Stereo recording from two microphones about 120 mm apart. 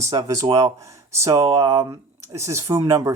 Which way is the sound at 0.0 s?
30° right (ahead or behind).